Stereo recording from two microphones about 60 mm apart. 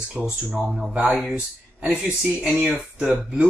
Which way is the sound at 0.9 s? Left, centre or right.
Centre.